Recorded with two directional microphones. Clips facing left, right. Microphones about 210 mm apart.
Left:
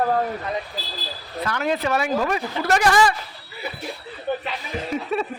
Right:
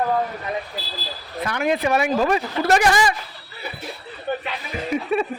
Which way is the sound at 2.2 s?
25° right (ahead or behind).